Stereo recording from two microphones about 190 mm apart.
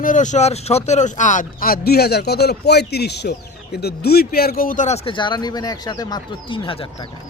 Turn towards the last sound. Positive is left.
turn(degrees=30)  # may be behind; listen again after turning